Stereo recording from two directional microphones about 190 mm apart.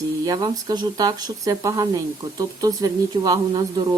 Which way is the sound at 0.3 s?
20° right (ahead or behind).